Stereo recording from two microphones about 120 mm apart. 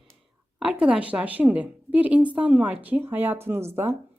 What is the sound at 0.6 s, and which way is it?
A woman's voice, 10° right (ahead or behind).